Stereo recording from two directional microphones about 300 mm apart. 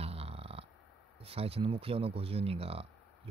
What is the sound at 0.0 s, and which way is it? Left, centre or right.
Burping, centre.